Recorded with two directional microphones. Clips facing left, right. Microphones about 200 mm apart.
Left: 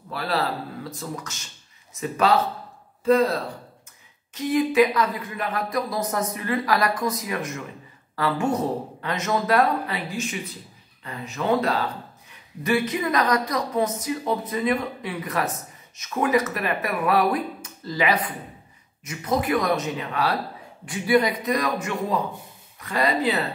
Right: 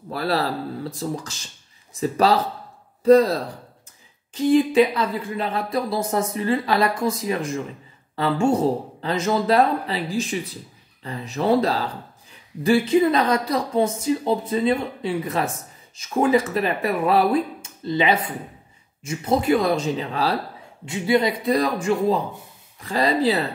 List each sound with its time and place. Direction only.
0.1 s speech: 40° right (ahead or behind)